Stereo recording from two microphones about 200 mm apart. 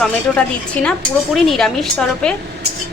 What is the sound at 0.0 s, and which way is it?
Speech, 5° left (ahead or behind).